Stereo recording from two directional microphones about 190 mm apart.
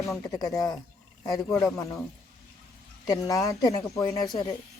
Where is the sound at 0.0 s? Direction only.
15° left (ahead or behind).